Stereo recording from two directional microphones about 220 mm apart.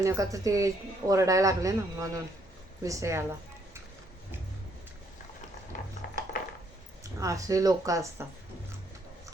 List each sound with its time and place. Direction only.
0.0 s speech: 15° right (ahead or behind)
6.0 s a sound: 45° left (ahead or behind)
7.0 s speech: 15° right (ahead or behind)